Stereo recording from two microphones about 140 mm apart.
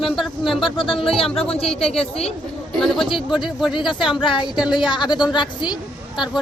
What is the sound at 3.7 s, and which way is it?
Speech, 35° left (ahead or behind).